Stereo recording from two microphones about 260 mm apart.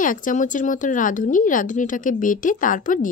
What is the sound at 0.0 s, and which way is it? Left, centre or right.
Speech, left.